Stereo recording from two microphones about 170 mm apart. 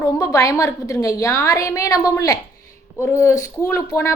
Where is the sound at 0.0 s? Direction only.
20° left (ahead or behind).